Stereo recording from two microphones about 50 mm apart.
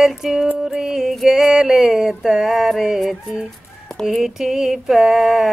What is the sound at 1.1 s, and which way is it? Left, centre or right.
Female singing, centre.